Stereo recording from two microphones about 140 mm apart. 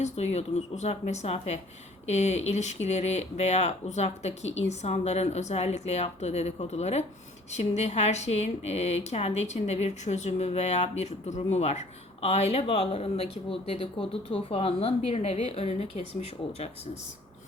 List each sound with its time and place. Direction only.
0.0 s speech: 50° left (ahead or behind)